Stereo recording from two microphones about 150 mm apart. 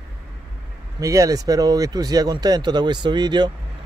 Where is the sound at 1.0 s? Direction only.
20° right (ahead or behind).